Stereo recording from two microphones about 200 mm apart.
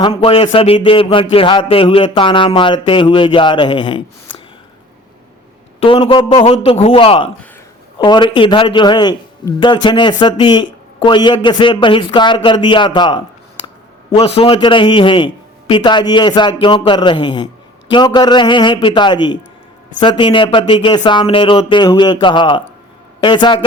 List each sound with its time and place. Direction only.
0.0 s a man's voice: 25° left (ahead or behind)
5.8 s a man's voice: 25° left (ahead or behind)
14.3 s a man's voice: 30° left (ahead or behind)